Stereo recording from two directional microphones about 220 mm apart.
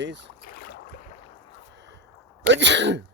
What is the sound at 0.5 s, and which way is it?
Boat, 40° left (ahead or behind).